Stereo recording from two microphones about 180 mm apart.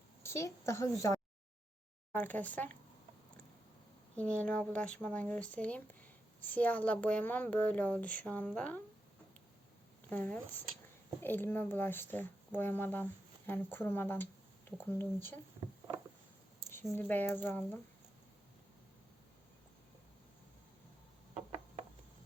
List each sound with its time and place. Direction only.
0.2 s a woman's voice: 15° left (ahead or behind)
4.2 s speech: 5° left (ahead or behind)
10.1 s speech: 10° left (ahead or behind)
16.9 s speech: 10° left (ahead or behind)